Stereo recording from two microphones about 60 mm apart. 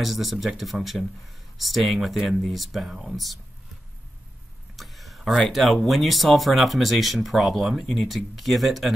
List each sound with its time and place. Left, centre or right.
0.0 s speech: centre
4.7 s speech: centre